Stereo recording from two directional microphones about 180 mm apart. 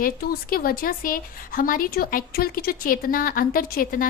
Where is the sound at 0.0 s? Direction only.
55° left (ahead or behind).